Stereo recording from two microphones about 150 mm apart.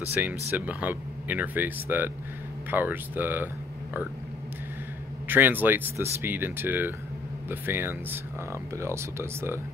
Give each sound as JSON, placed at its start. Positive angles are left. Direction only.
{"t": 0.1, "sound": "speech", "side_deg": -10}
{"t": 5.3, "sound": "speech", "side_deg": -15}